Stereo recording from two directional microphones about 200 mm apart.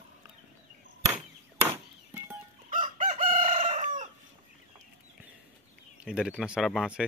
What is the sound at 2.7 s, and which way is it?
Chicken, 40° right (ahead or behind).